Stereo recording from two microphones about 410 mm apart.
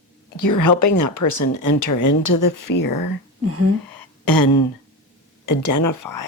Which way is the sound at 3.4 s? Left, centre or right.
Right.